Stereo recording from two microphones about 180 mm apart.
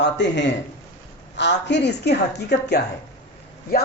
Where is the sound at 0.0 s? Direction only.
75° left (ahead or behind).